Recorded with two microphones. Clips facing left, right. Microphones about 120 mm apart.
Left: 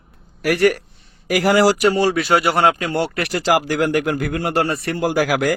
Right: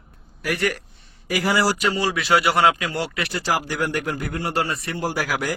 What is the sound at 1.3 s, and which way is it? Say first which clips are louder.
Speech: left 6 dB; 85° left.